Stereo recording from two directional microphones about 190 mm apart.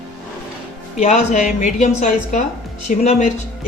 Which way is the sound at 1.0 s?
40° left (ahead or behind).